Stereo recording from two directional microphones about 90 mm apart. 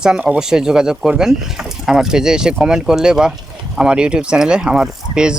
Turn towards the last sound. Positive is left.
turn(degrees=-10)  # may be behind; listen again after turning